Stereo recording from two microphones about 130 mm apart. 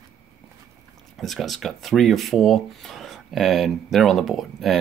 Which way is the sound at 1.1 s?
Centre (ahead or behind).